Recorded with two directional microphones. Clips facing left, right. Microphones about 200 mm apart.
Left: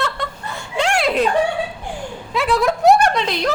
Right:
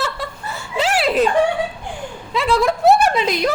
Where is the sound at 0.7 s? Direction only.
5° right (ahead or behind).